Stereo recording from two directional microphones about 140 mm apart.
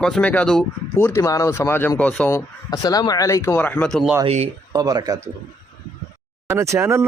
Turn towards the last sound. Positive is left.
turn(degrees=-20)  # may be behind; listen again after turning